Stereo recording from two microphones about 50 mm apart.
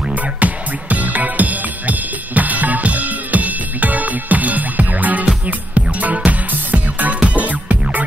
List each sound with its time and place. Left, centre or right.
0.1 s music: right